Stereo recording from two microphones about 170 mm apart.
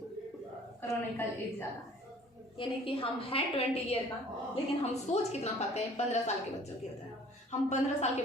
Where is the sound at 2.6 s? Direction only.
35° left (ahead or behind).